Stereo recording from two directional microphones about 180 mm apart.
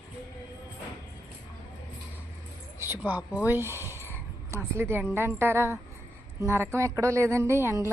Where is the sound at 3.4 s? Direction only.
10° right (ahead or behind).